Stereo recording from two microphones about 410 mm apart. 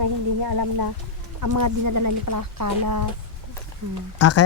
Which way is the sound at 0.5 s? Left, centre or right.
Right.